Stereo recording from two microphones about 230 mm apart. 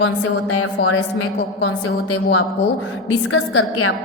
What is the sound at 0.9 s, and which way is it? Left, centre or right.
A woman's voice, left.